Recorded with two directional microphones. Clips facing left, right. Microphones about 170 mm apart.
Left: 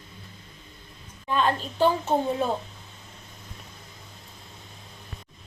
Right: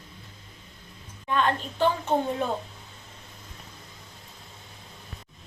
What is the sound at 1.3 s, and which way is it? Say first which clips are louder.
Speech: left 1 dB; 30° left (ahead or behind).